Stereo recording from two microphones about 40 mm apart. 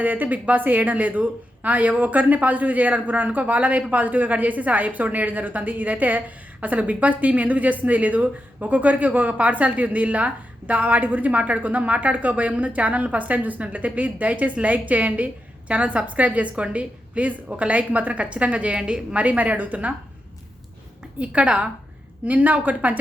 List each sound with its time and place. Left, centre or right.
0.0 s a woman's voice: right
19.1 s a woman's voice: right
21.2 s a woman's voice: right
22.3 s a woman's voice: right